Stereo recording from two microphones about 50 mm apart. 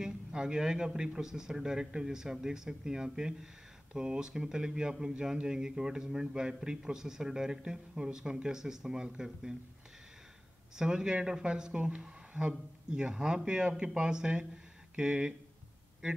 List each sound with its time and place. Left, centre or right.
0.0 s speech: centre
10.8 s speech: centre